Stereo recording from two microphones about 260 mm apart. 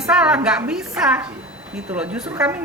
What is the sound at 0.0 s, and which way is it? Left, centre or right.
A woman's voice, centre.